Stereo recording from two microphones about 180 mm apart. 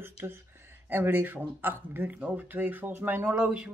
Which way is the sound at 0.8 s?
10° right (ahead or behind).